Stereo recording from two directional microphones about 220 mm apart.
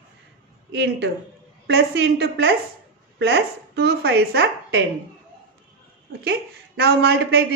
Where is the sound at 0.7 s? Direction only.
50° right (ahead or behind).